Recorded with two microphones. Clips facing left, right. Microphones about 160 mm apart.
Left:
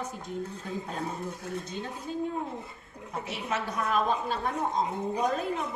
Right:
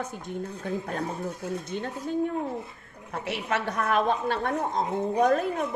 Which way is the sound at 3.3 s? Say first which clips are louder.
Right 5 dB; 65° right (ahead or behind).